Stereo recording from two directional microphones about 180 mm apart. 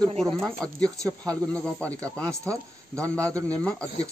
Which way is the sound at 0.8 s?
20° right (ahead or behind).